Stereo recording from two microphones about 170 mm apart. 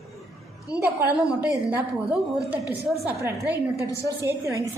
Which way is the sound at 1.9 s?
Centre (ahead or behind).